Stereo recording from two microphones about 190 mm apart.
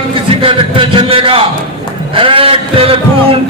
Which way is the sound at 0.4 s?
30° right (ahead or behind).